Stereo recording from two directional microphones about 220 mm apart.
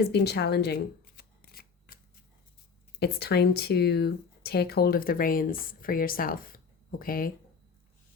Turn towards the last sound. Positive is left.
turn(degrees=40)  # may be behind; listen again after turning